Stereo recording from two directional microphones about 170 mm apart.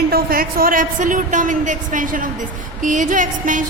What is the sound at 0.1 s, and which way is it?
A woman's voice, 60° right (ahead or behind).